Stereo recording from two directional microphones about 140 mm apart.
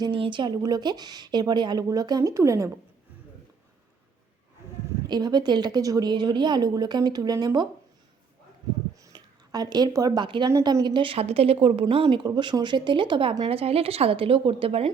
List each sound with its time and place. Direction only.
0.0 s speech: 35° right (ahead or behind)
5.0 s speech: 30° right (ahead or behind)
9.0 s speech: 25° right (ahead or behind); by 12.2 s 45° right (ahead or behind)
12.2 s speech: 30° right (ahead or behind)